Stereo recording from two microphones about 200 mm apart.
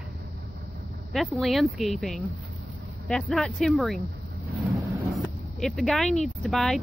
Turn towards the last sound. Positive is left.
turn(degrees=0)  # may be behind; listen again after turning